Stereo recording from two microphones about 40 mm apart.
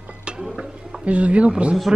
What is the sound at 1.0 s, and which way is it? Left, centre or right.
Speech, right.